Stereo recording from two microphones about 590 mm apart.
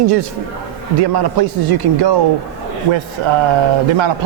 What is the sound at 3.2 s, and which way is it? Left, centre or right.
Speech, right.